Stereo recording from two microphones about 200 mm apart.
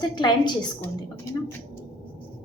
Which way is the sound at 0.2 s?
20° left (ahead or behind).